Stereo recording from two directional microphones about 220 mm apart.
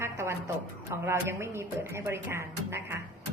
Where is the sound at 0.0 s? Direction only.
10° right (ahead or behind).